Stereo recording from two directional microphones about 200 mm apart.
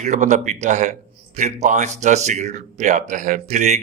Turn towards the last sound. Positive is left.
turn(degrees=-35)  # may be behind; listen again after turning